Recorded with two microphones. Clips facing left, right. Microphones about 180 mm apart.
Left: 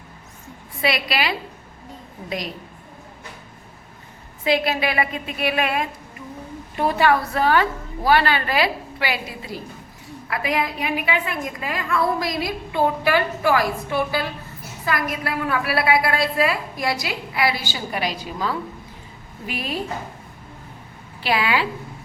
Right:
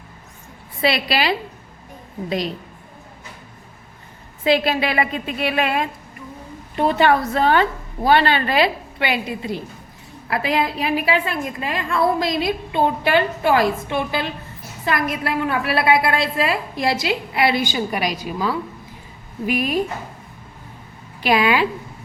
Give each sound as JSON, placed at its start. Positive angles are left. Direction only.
{"t": 0.8, "sound": "a woman's voice", "side_deg": -30}
{"t": 4.4, "sound": "a woman's voice", "side_deg": -30}
{"t": 21.2, "sound": "a woman's voice", "side_deg": -15}